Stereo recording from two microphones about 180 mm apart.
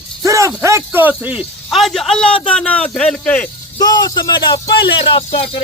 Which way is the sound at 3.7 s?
20° left (ahead or behind).